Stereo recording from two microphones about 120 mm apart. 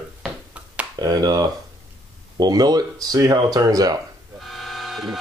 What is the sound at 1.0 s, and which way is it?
Speech, 35° right (ahead or behind).